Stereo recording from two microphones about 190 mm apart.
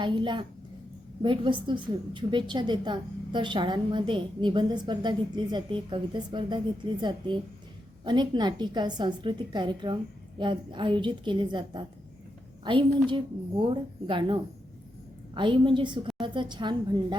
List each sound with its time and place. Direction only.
0.0 s a woman's voice: 25° right (ahead or behind)
13.1 s a woman's voice: 25° right (ahead or behind)
15.4 s a woman's voice: 25° right (ahead or behind)